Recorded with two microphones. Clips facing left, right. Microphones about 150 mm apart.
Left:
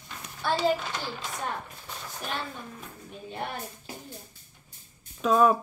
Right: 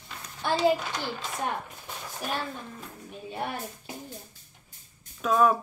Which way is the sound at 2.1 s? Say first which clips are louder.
Right 2 dB; 10° right (ahead or behind).